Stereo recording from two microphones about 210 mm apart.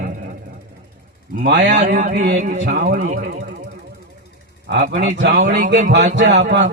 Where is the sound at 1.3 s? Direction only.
45° right (ahead or behind).